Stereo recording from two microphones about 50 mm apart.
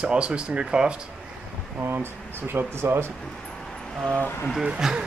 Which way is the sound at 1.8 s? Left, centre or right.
Right.